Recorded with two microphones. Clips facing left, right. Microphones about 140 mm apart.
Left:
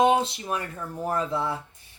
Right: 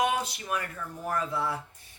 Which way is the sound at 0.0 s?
25° left (ahead or behind).